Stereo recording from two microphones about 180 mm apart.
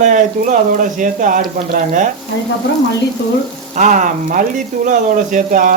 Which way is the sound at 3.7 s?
45° right (ahead or behind).